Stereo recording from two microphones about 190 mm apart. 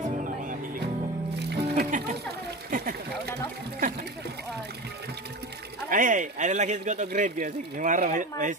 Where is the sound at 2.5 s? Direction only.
50° right (ahead or behind).